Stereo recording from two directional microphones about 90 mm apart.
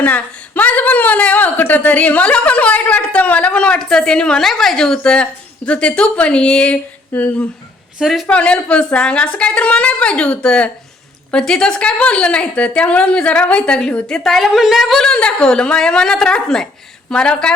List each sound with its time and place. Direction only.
0.0 s a woman's voice: 15° left (ahead or behind)
7.9 s speech: centre (ahead or behind)
8.3 s a woman's voice: 15° left (ahead or behind)